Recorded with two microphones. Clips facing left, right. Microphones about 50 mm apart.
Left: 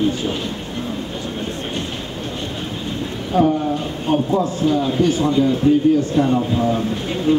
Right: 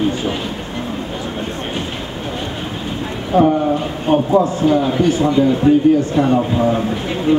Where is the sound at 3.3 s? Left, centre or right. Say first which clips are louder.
Right 4 dB; right.